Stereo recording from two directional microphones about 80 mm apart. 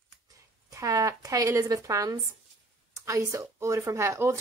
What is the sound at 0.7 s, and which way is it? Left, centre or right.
Speech, right.